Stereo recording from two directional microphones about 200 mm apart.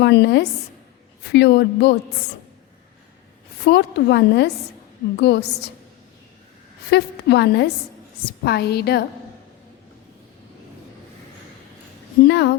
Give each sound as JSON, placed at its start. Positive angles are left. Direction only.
{"t": 0.0, "sound": "a woman's voice", "side_deg": 60}
{"t": 3.7, "sound": "a woman's voice", "side_deg": 55}
{"t": 6.9, "sound": "a woman's voice", "side_deg": 60}
{"t": 12.3, "sound": "a woman's voice", "side_deg": 55}